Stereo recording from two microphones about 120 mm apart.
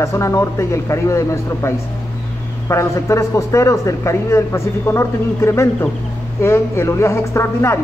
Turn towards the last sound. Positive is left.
turn(degrees=20)  # may be behind; listen again after turning